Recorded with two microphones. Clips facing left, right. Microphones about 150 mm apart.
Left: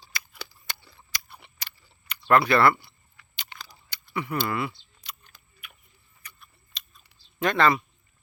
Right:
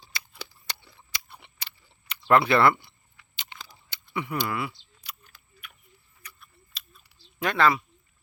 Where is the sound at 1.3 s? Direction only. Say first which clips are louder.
Even; 20° right (ahead or behind).